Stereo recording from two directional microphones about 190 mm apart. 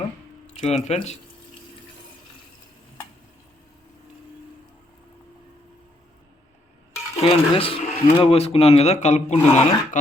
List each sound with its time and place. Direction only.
0.6 s speech: 35° left (ahead or behind)
7.2 s speech: 30° left (ahead or behind)